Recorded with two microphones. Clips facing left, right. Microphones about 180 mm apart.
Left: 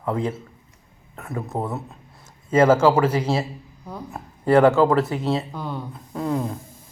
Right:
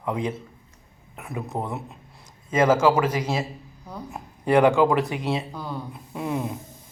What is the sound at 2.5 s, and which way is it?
Speech, 10° right (ahead or behind).